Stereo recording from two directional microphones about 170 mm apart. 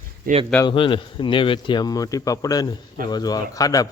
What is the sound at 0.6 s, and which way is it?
Speech, 30° left (ahead or behind).